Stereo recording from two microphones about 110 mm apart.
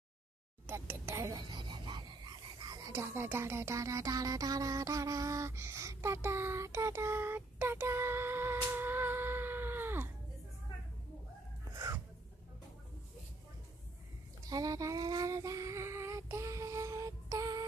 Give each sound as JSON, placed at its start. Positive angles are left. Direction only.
{"t": 0.7, "sound": "speech", "side_deg": -20}
{"t": 1.5, "sound": "a sound", "side_deg": -45}
{"t": 2.9, "sound": "speech", "side_deg": -20}
{"t": 11.7, "sound": "gasp", "side_deg": -35}
{"t": 14.4, "sound": "child singing", "side_deg": -35}